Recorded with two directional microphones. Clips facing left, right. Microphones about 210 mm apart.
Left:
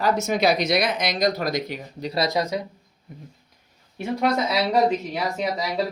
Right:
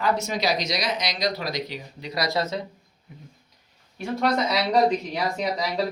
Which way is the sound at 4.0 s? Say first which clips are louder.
Left 2 dB; 20° left (ahead or behind).